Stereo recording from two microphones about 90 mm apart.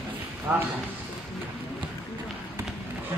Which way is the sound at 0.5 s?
15° right (ahead or behind).